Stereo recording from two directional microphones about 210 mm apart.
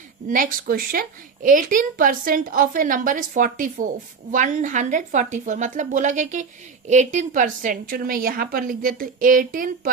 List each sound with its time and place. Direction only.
0.3 s a woman's voice: 40° right (ahead or behind)